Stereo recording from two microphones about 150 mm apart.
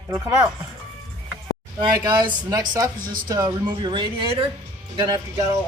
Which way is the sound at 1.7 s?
30° right (ahead or behind).